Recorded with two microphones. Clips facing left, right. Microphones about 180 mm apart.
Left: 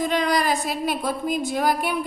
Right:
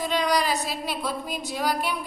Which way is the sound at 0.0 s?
50° left (ahead or behind).